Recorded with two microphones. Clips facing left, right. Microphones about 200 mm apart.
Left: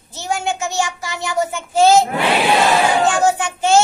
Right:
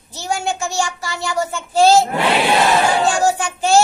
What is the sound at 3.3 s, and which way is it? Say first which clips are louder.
Child singing: left 1 dB; 20° left (ahead or behind).